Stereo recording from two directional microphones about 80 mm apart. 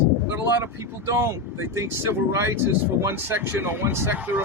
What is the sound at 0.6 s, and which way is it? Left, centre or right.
Speech, right.